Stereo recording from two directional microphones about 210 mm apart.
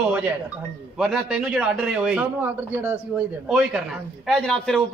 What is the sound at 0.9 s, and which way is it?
A man's voice, centre (ahead or behind).